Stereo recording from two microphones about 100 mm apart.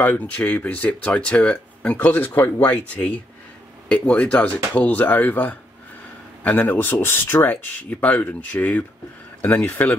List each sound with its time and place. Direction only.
0.0 s speech: 20° left (ahead or behind)